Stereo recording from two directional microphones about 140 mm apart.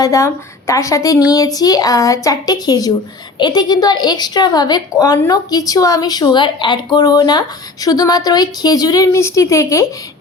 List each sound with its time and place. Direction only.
0.0 s a woman's voice: 25° left (ahead or behind)